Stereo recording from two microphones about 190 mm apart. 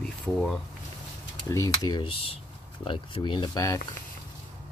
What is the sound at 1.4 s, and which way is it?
Speech, 15° left (ahead or behind).